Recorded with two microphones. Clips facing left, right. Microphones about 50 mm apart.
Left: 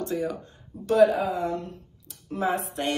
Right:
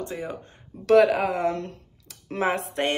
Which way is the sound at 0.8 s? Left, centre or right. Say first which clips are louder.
Right 2 dB; right.